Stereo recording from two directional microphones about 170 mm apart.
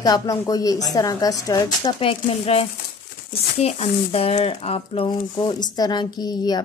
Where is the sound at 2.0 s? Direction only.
35° left (ahead or behind).